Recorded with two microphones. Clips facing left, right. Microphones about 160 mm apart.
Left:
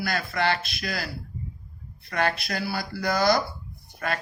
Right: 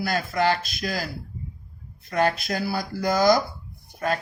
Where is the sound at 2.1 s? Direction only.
45° right (ahead or behind).